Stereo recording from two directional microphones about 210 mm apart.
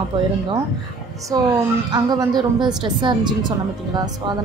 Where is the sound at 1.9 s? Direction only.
20° right (ahead or behind).